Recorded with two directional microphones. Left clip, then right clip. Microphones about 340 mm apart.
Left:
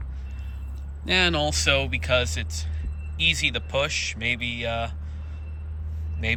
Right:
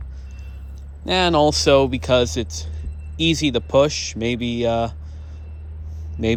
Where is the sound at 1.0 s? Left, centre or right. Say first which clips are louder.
Right 6 dB; centre.